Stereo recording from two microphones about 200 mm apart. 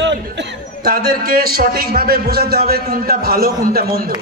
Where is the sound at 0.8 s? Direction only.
50° right (ahead or behind).